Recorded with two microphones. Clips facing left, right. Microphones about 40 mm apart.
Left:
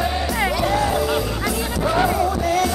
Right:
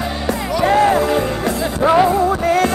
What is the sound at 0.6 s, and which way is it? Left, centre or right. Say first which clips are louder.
Music: right 11 dB; right.